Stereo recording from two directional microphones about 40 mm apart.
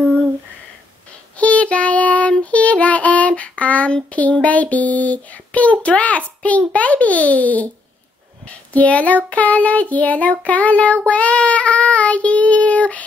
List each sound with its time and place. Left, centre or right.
1.4 s child singing: left
8.7 s child singing: left